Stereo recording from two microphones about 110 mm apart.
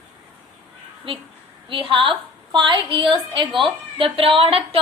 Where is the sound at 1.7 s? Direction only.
50° right (ahead or behind).